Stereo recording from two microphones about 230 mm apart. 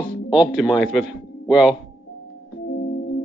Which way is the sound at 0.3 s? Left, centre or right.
Centre.